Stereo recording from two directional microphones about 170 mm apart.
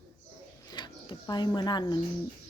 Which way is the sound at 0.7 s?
25° left (ahead or behind).